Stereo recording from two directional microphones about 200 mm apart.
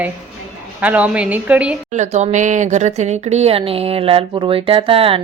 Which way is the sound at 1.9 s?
35° right (ahead or behind).